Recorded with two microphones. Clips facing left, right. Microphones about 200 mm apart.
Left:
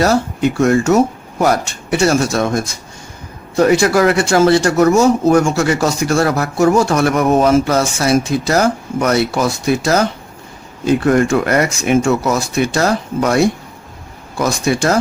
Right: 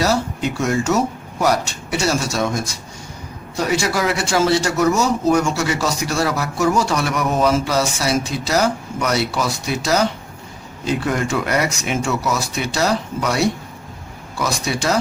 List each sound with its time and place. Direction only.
0.0 s speech: 55° left (ahead or behind)